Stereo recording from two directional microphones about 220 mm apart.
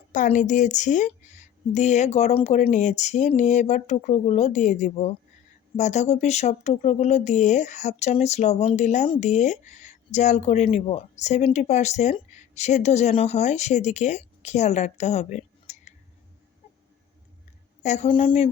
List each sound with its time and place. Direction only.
0.1 s speech: 35° left (ahead or behind)
17.8 s a woman's voice: 30° left (ahead or behind)